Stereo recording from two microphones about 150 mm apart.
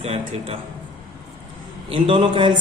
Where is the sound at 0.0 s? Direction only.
40° right (ahead or behind).